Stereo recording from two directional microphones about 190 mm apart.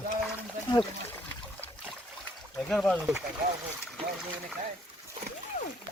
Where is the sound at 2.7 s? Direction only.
Centre (ahead or behind).